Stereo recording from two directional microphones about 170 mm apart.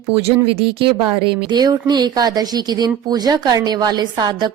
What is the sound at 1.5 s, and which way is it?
Speech, 25° right (ahead or behind).